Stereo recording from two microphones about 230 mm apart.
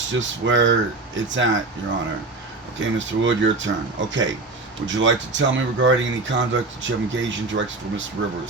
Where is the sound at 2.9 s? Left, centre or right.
Right.